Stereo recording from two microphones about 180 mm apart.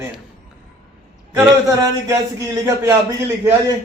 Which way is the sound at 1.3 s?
15° right (ahead or behind).